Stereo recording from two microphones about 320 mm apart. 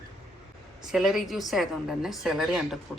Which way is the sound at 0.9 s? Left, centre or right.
Centre.